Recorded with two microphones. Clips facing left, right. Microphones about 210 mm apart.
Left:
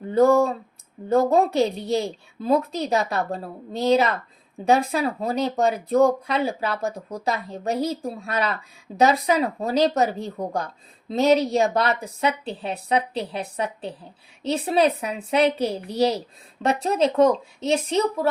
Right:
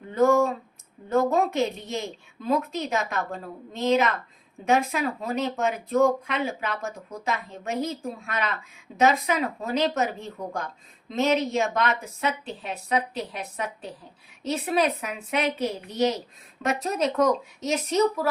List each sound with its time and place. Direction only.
0.1 s a woman's voice: 35° left (ahead or behind)